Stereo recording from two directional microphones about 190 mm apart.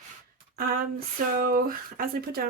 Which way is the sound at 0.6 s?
50° right (ahead or behind).